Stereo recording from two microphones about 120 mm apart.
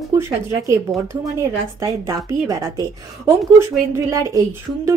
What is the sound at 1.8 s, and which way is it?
A woman's voice, 30° right (ahead or behind).